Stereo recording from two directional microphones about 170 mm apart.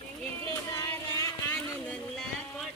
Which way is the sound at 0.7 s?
20° left (ahead or behind).